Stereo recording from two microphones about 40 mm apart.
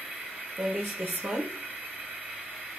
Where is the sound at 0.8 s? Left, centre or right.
Right.